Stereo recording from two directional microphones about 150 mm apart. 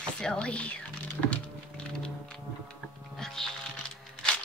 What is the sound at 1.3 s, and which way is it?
Thunk, 5° left (ahead or behind).